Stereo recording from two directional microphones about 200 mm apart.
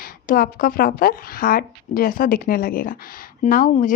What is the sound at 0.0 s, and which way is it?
Speech, 45° left (ahead or behind).